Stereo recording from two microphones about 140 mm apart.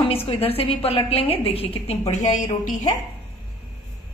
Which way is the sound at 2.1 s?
60° left (ahead or behind).